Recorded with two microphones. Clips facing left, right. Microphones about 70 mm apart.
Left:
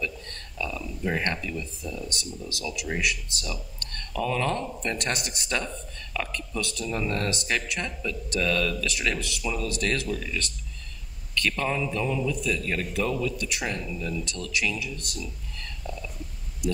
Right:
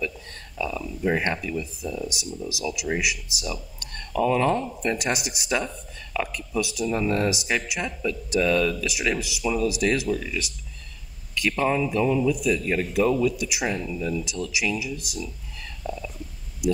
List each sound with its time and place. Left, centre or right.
0.0 s speech: centre